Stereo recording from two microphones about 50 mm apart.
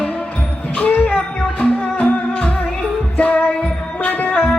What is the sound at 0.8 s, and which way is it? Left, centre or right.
Music, left.